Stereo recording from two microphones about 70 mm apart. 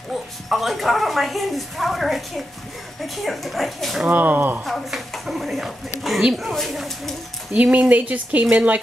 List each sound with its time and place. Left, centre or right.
0.1 s speech: centre
4.1 s speech: right
4.6 s speech: centre
7.5 s speech: centre